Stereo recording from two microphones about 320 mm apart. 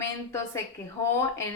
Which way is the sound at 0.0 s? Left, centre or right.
Centre.